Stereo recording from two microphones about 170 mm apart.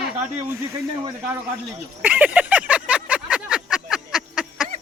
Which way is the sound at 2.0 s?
10° right (ahead or behind).